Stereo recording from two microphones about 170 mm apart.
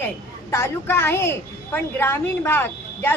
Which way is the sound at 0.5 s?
15° left (ahead or behind).